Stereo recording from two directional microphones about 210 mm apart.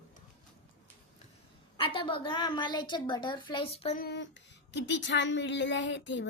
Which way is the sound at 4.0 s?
55° left (ahead or behind).